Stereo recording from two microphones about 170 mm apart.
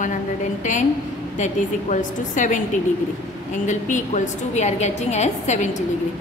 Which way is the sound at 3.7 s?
45° left (ahead or behind).